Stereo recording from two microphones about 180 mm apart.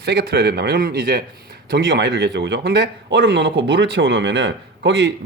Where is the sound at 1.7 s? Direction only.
70° right (ahead or behind).